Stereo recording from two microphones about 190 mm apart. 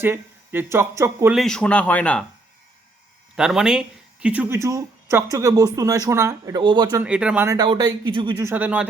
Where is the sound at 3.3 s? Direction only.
5° right (ahead or behind); by 7.0 s 25° right (ahead or behind).